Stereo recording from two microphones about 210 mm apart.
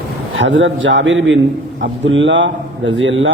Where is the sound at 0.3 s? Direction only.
65° right (ahead or behind).